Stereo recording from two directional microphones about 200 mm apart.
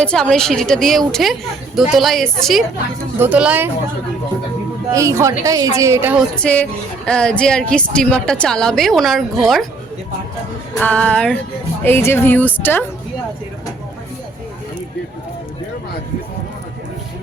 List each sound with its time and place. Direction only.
0.0 s a woman's voice: 5° left (ahead or behind)
4.9 s a woman's voice: 15° right (ahead or behind)
6.4 s speech: 5° left (ahead or behind)
10.8 s speech: 5° left (ahead or behind)